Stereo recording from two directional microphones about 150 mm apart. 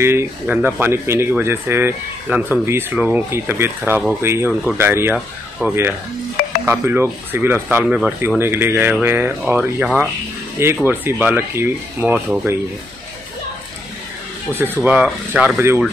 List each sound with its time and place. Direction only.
0.0 s speech: 15° right (ahead or behind)
7.8 s speech: 5° right (ahead or behind)
8.4 s speech: 15° right (ahead or behind)
14.5 s speech: 15° right (ahead or behind)